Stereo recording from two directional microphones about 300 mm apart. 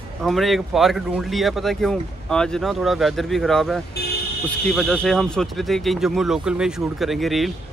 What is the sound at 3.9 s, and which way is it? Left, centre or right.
Vehicle, left.